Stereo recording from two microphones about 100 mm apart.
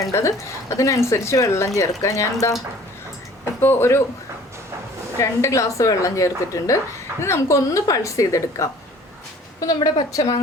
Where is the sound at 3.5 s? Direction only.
25° left (ahead or behind).